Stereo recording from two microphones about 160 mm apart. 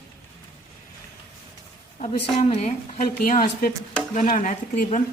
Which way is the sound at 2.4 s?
40° left (ahead or behind).